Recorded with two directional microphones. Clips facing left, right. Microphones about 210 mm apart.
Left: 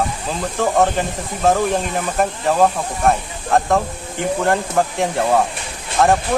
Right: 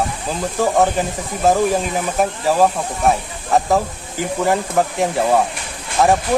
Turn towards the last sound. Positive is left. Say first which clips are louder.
# even
turn(degrees=0)  # may be behind; listen again after turning